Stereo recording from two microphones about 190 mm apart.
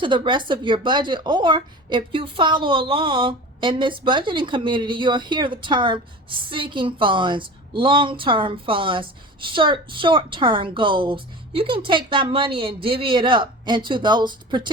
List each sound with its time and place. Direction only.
0.0 s speech: 25° right (ahead or behind)